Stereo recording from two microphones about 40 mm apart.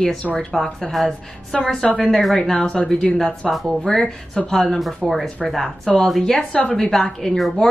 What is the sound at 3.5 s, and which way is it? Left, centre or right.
Speech, centre.